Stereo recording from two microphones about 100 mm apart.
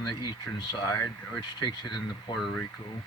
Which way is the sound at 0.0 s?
45° left (ahead or behind).